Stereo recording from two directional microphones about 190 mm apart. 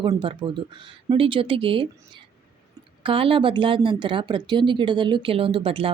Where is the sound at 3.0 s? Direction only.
30° right (ahead or behind).